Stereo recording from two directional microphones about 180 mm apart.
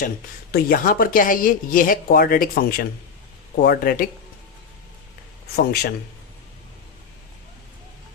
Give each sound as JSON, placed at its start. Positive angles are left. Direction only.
{"t": 0.5, "sound": "speech", "side_deg": 55}
{"t": 5.5, "sound": "speech", "side_deg": 60}